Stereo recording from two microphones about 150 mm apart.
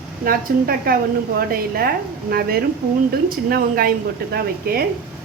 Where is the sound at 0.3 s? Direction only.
80° right.